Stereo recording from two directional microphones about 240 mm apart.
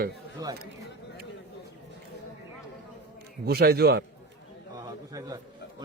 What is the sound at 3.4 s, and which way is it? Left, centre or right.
Speech, right.